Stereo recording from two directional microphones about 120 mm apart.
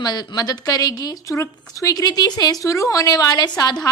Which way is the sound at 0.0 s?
35° left (ahead or behind).